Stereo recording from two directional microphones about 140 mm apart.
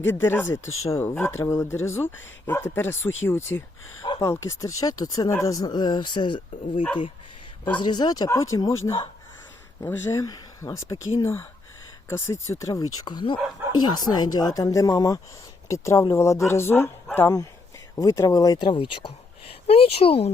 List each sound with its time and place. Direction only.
0.0 s speech: 15° left (ahead or behind); by 20.3 s 45° left (ahead or behind)